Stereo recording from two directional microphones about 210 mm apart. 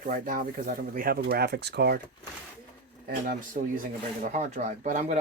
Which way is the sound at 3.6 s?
40° right (ahead or behind).